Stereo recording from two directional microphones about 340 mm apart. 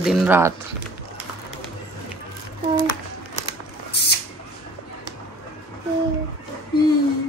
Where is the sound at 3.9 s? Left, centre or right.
Left.